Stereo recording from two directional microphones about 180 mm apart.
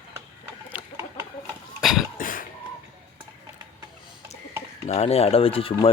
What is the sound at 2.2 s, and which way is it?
Cough, 50° left (ahead or behind).